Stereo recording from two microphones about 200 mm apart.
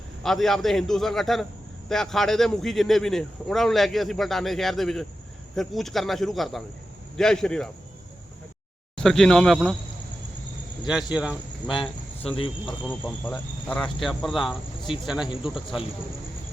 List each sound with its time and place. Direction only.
0.2 s speech: centre (ahead or behind)
9.0 s speech: centre (ahead or behind)
10.8 s speech: 5° right (ahead or behind)
11.7 s speech: 25° left (ahead or behind)
12.8 s speech: 10° left (ahead or behind)